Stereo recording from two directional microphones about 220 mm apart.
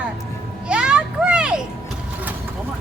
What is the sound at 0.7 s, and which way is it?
Children playing, 5° right (ahead or behind).